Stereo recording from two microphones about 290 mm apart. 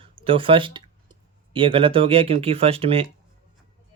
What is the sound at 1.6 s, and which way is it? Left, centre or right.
Speech, centre.